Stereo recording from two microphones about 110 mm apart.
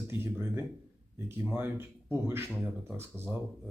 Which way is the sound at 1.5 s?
20° right (ahead or behind).